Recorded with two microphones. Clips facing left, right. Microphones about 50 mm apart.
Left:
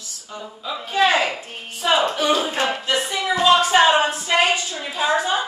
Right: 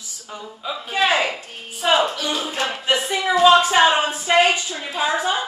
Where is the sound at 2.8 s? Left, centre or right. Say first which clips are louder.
Right 2 dB; centre.